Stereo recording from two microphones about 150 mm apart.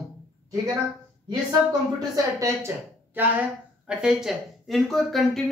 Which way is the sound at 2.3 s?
20° right (ahead or behind).